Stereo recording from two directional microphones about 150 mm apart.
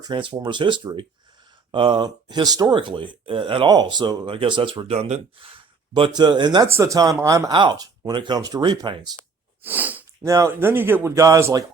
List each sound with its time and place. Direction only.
0.0 s speech: 35° right (ahead or behind)
9.6 s speech: 10° right (ahead or behind)
10.2 s speech: 20° right (ahead or behind)